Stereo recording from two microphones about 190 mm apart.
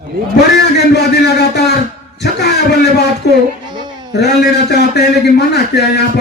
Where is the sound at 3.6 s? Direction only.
25° right (ahead or behind).